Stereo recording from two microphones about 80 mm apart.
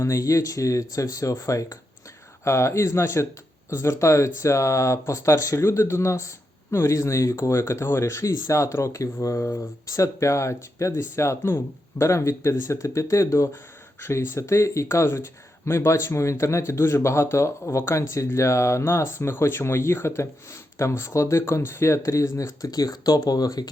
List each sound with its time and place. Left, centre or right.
0.0 s speech: left